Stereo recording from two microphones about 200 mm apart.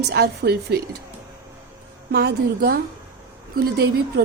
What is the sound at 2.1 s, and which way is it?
A woman's voice, 55° right (ahead or behind).